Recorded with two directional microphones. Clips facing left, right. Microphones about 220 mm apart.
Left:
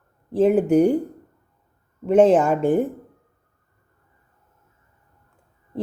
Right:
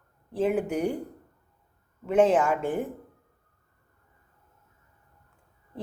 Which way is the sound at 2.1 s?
40° left (ahead or behind).